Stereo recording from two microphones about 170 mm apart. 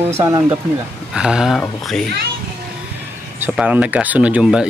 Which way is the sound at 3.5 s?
5° right (ahead or behind).